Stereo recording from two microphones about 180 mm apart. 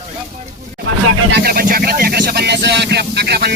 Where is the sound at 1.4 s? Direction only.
60° right (ahead or behind).